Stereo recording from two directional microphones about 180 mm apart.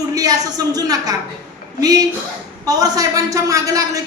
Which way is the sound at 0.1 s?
20° right (ahead or behind).